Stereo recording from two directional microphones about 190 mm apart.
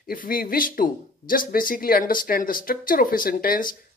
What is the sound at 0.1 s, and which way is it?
Speech, 50° left (ahead or behind).